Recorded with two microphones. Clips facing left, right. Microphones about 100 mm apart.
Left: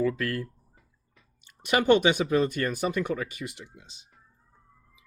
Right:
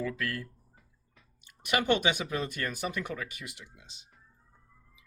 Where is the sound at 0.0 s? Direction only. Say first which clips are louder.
Left 7 dB; 35° left (ahead or behind).